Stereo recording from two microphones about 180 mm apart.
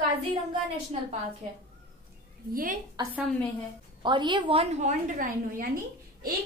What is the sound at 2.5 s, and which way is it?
Speech, 50° right (ahead or behind).